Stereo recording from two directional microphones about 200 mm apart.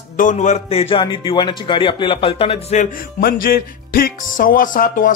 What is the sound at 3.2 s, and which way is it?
Speech, 50° left (ahead or behind).